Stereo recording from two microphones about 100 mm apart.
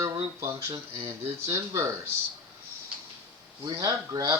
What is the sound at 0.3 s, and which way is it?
Speech, 30° right (ahead or behind).